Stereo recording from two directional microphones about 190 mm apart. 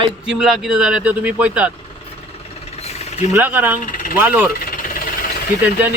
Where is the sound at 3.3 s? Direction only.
10° right (ahead or behind).